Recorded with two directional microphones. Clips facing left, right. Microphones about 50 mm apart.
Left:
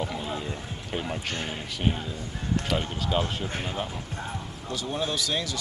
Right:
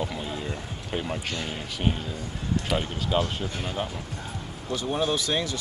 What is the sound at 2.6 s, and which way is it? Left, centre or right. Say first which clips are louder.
Speech: right 1 dB; centre.